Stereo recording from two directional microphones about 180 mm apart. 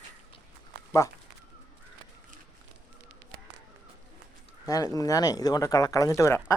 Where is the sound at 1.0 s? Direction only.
20° left (ahead or behind).